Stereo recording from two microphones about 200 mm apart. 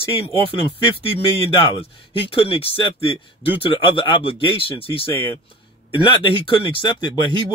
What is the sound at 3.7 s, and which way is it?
Speech, 25° left (ahead or behind).